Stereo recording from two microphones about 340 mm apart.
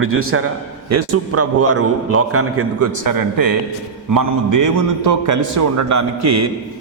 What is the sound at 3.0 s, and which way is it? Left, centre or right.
Speech, right.